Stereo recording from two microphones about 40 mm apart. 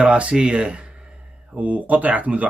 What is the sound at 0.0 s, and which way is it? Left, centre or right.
A man's voice, right.